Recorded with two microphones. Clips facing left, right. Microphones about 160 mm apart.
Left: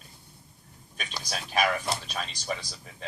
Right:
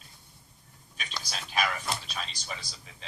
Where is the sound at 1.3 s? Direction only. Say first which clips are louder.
Left 5 dB; 50° left (ahead or behind).